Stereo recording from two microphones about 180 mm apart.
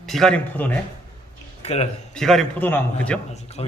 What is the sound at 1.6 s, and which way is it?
Speech, 35° left (ahead or behind).